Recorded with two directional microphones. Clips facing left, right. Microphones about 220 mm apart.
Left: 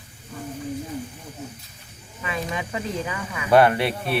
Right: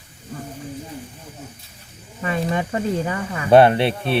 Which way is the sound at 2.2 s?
40° right (ahead or behind).